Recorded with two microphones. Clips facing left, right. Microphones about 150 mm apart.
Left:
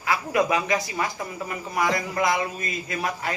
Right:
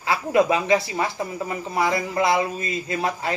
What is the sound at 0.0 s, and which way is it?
Speech, 25° right (ahead or behind).